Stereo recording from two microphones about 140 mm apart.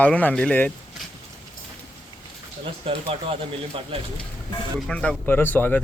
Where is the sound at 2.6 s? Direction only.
40° right (ahead or behind).